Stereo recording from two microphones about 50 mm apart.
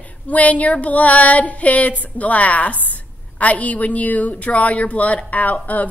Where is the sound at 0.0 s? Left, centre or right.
Left.